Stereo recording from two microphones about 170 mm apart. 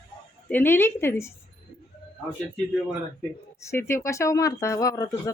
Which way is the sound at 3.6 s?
15° left (ahead or behind).